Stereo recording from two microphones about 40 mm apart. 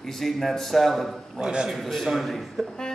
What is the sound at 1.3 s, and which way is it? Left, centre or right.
Speech, right.